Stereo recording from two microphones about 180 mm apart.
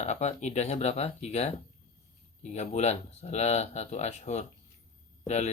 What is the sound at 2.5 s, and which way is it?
Speech, 40° left (ahead or behind).